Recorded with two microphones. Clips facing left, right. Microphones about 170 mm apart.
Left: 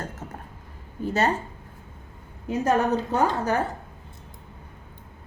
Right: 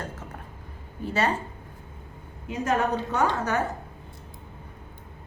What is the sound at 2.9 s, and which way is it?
Speech, 35° left (ahead or behind).